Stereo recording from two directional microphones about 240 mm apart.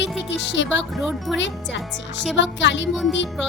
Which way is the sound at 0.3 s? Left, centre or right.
Left.